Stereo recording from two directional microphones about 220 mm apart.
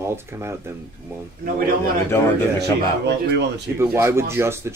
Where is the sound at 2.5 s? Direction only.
50° right (ahead or behind).